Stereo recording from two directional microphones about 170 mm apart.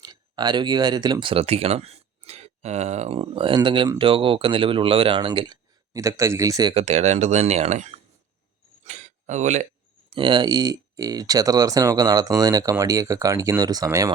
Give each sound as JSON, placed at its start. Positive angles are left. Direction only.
{"t": 0.0, "sound": "speech", "side_deg": -25}
{"t": 6.7, "sound": "speech", "side_deg": -40}
{"t": 8.8, "sound": "a sound", "side_deg": -45}
{"t": 10.2, "sound": "speech", "side_deg": -30}